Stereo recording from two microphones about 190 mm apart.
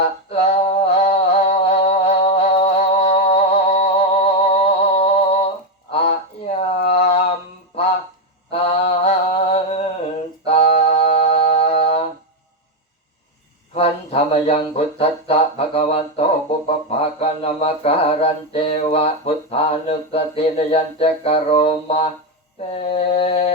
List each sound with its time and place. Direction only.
0.3 s music: 35° left (ahead or behind)
5.9 s a sound: 30° left (ahead or behind)
6.8 s mantra: 30° left (ahead or behind)
8.4 s mantra: 30° left (ahead or behind)
10.4 s a sound: 30° left (ahead or behind)
13.7 s speech: 30° left (ahead or behind)
22.8 s mantra: 30° left (ahead or behind)